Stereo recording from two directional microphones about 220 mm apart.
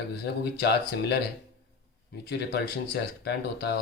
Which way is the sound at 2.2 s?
45° left (ahead or behind).